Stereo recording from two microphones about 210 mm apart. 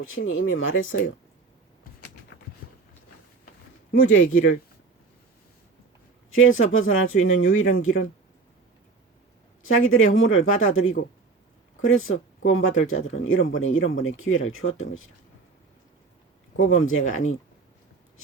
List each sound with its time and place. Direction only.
0.6 s speech: 70° left (ahead or behind)
4.0 s speech: 75° left (ahead or behind)
6.3 s speech: 70° left (ahead or behind)
9.6 s speech: 75° left (ahead or behind)
16.6 s speech: 70° left (ahead or behind)